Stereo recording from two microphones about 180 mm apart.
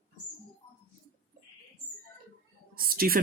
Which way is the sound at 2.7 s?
55° right (ahead or behind).